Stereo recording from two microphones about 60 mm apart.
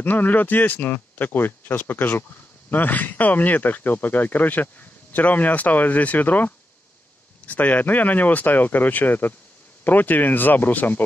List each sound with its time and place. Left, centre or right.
0.0 s speech: left